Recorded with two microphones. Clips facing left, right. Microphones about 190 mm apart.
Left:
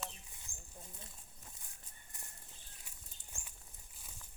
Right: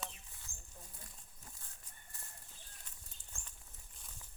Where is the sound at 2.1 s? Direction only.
15° left (ahead or behind).